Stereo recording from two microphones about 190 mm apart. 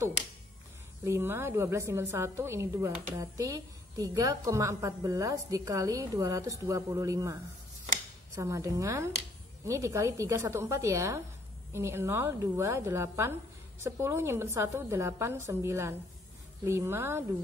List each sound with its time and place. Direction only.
1.0 s a woman's voice: 15° right (ahead or behind)
8.4 s a woman's voice: 15° right (ahead or behind)